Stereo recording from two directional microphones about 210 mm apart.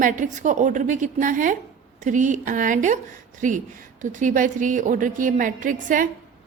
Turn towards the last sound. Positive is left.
turn(degrees=-40)  # may be behind; listen again after turning